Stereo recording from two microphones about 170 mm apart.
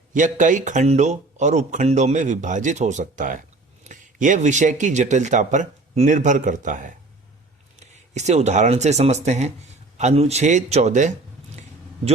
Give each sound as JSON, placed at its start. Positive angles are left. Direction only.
{"t": 0.1, "sound": "a man's voice", "side_deg": -50}